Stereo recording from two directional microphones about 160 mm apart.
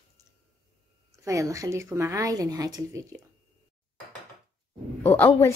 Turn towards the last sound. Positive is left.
turn(degrees=15)  # may be behind; listen again after turning